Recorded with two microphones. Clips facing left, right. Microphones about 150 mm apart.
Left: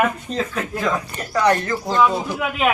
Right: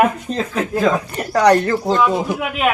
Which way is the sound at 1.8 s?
Centre (ahead or behind).